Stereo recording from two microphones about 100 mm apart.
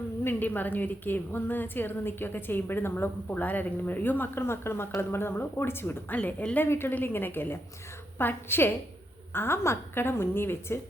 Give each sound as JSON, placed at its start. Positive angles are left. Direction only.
{"t": 0.3, "sound": "a woman's voice", "side_deg": 20}